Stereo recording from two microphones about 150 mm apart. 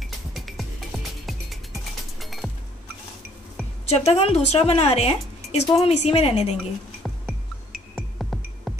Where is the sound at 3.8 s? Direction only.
45° left (ahead or behind).